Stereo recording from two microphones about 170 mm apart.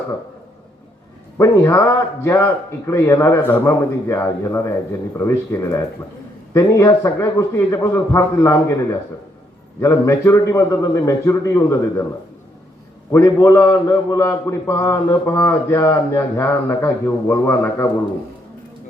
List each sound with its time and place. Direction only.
1.4 s a man's voice: 15° left (ahead or behind)
13.1 s a man's voice: 15° left (ahead or behind)